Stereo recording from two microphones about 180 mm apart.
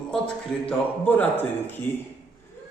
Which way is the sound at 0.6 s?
10° left (ahead or behind).